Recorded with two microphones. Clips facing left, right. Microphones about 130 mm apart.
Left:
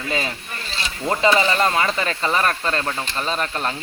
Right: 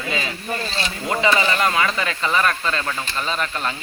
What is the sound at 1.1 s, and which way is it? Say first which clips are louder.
Speech: left 2 dB; 30° left (ahead or behind).